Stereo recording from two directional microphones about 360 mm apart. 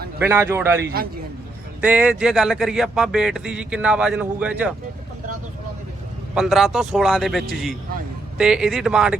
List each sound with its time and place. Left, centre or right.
0.2 s a man's voice: centre
0.8 s a man's voice: right
1.8 s speech: centre
6.3 s speech: centre